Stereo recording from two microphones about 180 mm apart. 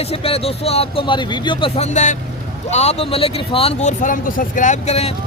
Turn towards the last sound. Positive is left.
turn(degrees=35)  # may be behind; listen again after turning